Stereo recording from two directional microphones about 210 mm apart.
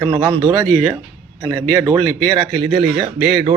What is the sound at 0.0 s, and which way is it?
Speech, 20° right (ahead or behind).